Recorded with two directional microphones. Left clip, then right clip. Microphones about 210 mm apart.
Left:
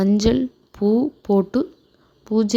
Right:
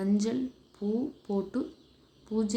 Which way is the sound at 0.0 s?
35° left (ahead or behind).